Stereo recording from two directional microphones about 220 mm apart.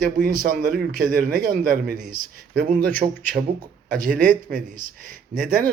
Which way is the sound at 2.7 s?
10° left (ahead or behind).